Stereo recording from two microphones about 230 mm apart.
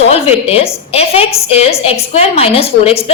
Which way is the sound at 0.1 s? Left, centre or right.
Left.